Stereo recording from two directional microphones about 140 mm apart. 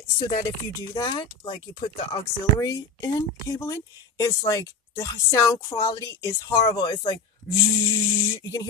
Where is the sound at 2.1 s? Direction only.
25° left (ahead or behind).